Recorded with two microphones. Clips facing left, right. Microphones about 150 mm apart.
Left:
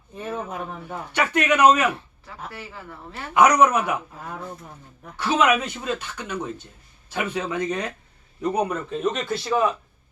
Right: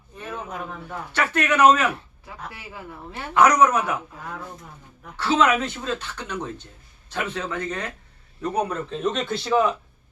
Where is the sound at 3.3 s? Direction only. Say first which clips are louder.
Even; 10° left (ahead or behind).